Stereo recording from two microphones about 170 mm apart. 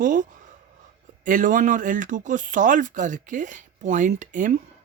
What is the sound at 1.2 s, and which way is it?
Speech, 50° right (ahead or behind).